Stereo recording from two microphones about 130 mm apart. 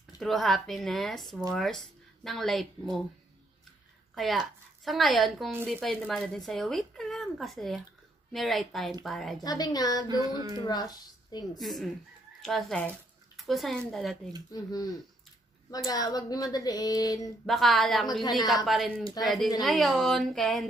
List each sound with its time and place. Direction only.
0.2 s speech: centre (ahead or behind)
4.1 s a woman's voice: centre (ahead or behind)
9.4 s speech: 30° left (ahead or behind)
10.0 s a sound: 30° right (ahead or behind)
10.6 s speech: 30° left (ahead or behind)
11.6 s speech: centre (ahead or behind)
14.5 s speech: 30° left (ahead or behind)
17.5 s speech: centre (ahead or behind)